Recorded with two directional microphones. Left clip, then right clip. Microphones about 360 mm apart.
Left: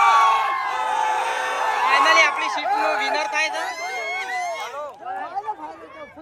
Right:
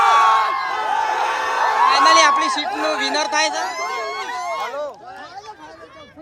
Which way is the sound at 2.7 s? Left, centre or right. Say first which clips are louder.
Even; centre.